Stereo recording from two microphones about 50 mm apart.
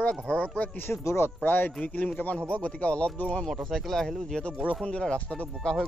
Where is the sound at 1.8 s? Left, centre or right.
Left.